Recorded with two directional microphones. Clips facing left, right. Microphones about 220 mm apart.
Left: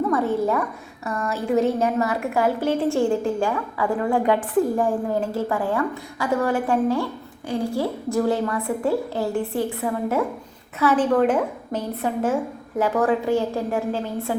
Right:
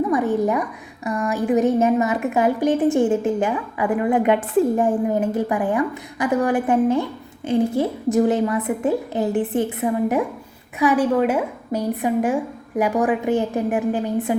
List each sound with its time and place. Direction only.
0.1 s a woman's voice: 15° right (ahead or behind)